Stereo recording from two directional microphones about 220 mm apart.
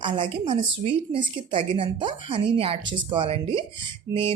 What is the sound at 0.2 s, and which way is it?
Speech, 25° right (ahead or behind).